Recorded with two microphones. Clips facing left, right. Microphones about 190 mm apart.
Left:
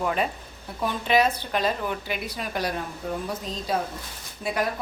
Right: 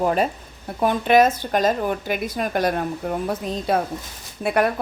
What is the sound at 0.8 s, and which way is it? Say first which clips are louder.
A woman's voice: right 6 dB; 55° right (ahead or behind).